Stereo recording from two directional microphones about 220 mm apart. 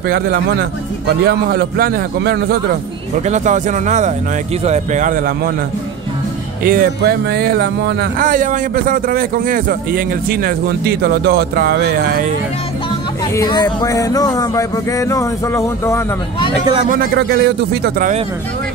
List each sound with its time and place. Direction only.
1.0 s speech: 45° right (ahead or behind)
3.3 s speech: 35° right (ahead or behind)
6.6 s speech: 40° right (ahead or behind)
13.4 s speech: 20° left (ahead or behind)
17.0 s speech: 50° right (ahead or behind)